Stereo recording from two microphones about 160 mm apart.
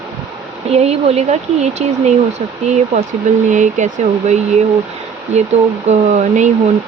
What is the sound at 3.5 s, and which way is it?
Speech, 50° right (ahead or behind).